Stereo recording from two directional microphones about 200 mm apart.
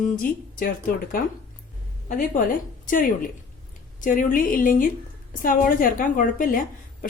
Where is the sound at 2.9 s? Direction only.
40° left (ahead or behind).